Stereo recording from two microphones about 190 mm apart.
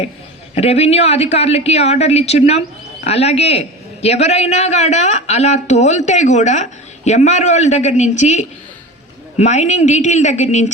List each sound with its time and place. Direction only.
0.5 s speech: 35° left (ahead or behind)